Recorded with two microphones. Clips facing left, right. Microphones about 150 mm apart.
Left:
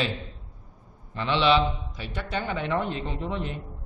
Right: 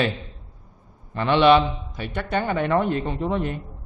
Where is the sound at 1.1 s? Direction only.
55° right (ahead or behind).